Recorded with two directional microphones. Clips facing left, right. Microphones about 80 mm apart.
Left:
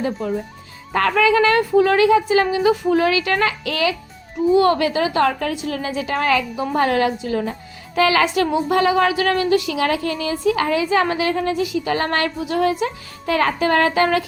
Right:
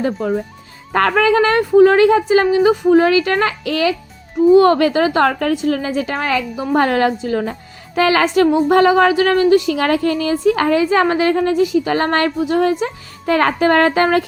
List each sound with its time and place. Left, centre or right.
0.0 s a woman's voice: right
9.7 s a woman's voice: right